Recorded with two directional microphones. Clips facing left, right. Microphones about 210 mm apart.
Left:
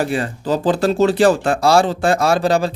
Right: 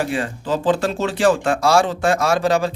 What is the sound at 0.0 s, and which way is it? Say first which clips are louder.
Speech: left 3 dB; 40° left (ahead or behind).